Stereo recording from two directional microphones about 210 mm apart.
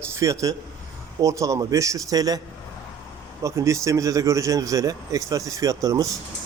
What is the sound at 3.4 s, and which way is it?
Speech, 15° right (ahead or behind).